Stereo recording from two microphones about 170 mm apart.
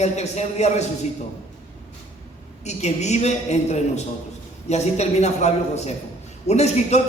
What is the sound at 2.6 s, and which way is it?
A man's voice, 40° left (ahead or behind).